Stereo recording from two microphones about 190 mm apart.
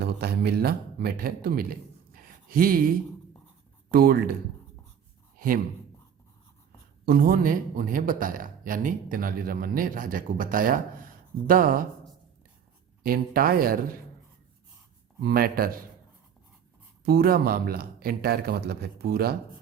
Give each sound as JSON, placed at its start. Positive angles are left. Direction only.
{"t": 0.0, "sound": "speech", "side_deg": -55}
{"t": 2.1, "sound": "a sound", "side_deg": -50}
{"t": 3.9, "sound": "a man's voice", "side_deg": -50}
{"t": 7.0, "sound": "a man's voice", "side_deg": -50}
{"t": 13.0, "sound": "a man's voice", "side_deg": -50}
{"t": 15.2, "sound": "a man's voice", "side_deg": -50}
{"t": 17.1, "sound": "a man's voice", "side_deg": -55}